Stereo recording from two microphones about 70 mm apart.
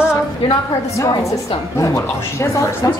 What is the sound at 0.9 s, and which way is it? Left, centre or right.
A woman's voice, left.